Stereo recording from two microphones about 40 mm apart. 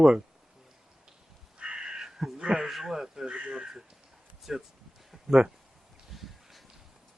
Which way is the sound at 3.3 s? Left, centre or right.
Right.